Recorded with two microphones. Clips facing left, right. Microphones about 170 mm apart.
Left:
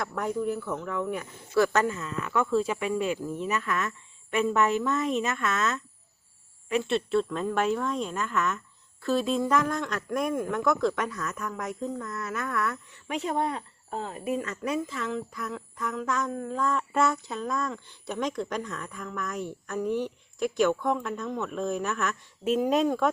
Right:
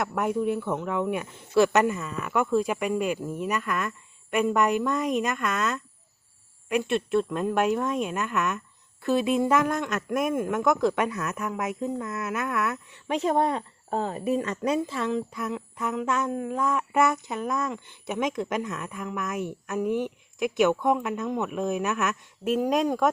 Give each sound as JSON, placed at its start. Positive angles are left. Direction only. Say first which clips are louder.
{"t": 0.0, "sound": "speech", "louder": "right 3 dB", "side_deg": -20}
{"t": 2.7, "sound": "speech", "louder": "right 2 dB", "side_deg": -5}
{"t": 13.1, "sound": "speech", "louder": "right 5 dB", "side_deg": -35}
{"t": 22.7, "sound": "speech", "louder": "right 2 dB", "side_deg": 0}